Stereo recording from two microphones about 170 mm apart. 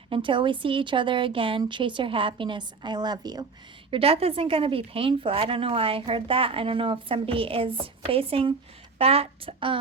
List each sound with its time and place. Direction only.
0.1 s a woman's voice: 30° right (ahead or behind)
3.9 s a woman's voice: 35° right (ahead or behind)